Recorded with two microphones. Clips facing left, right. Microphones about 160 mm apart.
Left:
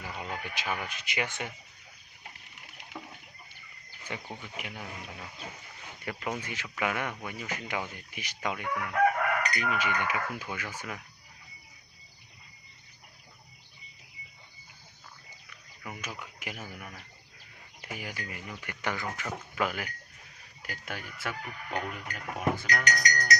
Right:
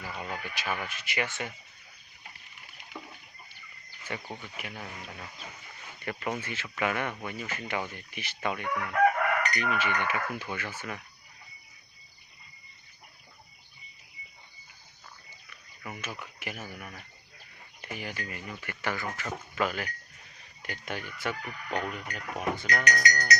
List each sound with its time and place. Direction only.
0.0 s a sound: 15° left (ahead or behind)
0.8 s chicken: 15° left (ahead or behind)
4.1 s chicken: 15° left (ahead or behind)
6.0 s speech: 10° left (ahead or behind)
6.4 s chicken: 15° left (ahead or behind)
15.8 s chicken: 10° left (ahead or behind)
17.8 s chicken: 10° left (ahead or behind)
20.6 s speech: centre (ahead or behind)